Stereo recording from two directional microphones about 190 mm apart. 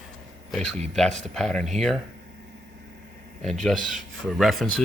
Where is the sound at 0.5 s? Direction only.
Centre (ahead or behind).